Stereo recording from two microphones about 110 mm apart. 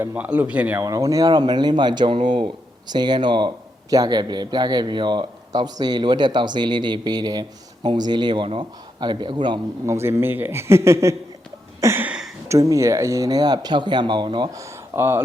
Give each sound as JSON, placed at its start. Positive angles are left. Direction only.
{"t": 0.0, "sound": "speech", "side_deg": -15}
{"t": 0.8, "sound": "speech", "side_deg": -30}
{"t": 9.8, "sound": "a man's voice", "side_deg": -25}
{"t": 11.8, "sound": "a sound", "side_deg": -25}
{"t": 12.0, "sound": "a sound", "side_deg": -10}
{"t": 12.5, "sound": "speech", "side_deg": -30}
{"t": 14.5, "sound": "speech", "side_deg": -25}